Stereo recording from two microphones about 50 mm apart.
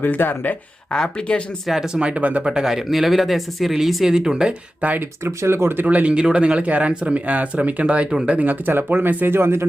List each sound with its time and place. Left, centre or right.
0.0 s speech: left
0.9 s speech: centre
1.6 s speech: centre
2.0 s speech: right
2.4 s speech: centre
2.6 s speech: centre
5.2 s speech: right
5.8 s speech: right
6.1 s speech: centre; by 9.6 s right